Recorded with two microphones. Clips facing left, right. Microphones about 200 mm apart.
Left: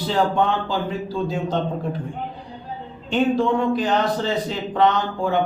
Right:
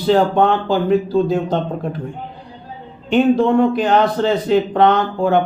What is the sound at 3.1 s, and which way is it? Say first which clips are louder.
A man's voice: right 6 dB; 60° right (ahead or behind).